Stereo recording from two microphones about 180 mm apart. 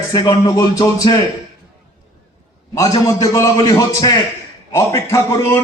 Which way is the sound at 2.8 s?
20° left (ahead or behind).